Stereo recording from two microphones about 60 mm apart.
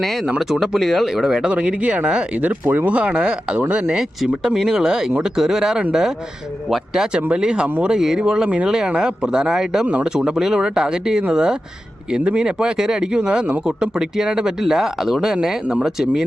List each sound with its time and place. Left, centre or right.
0.3 s speech: centre
4.4 s speech: centre
9.8 s speech: right
10.2 s speech: centre